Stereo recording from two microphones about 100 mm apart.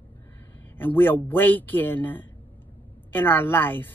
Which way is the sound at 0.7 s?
20° left (ahead or behind).